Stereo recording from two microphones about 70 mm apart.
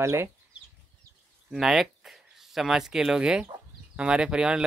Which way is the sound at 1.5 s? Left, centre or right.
Centre.